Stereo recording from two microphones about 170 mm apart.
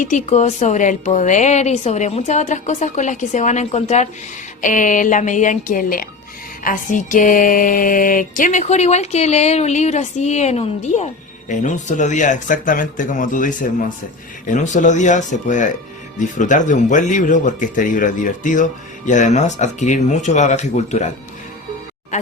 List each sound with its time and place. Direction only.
0.0 s music: 45° left (ahead or behind)